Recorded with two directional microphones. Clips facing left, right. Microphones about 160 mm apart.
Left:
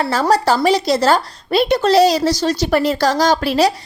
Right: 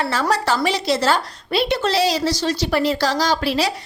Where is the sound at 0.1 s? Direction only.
35° left (ahead or behind).